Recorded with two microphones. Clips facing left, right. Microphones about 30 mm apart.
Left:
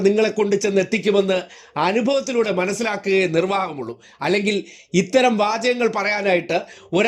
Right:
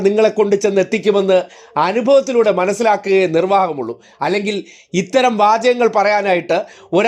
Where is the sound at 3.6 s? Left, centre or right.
Centre.